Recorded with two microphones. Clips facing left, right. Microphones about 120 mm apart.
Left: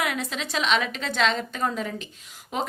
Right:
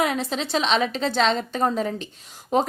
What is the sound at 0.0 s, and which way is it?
A woman's voice, 30° right (ahead or behind).